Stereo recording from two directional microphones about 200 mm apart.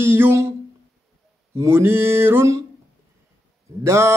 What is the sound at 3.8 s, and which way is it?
Speech, 15° right (ahead or behind).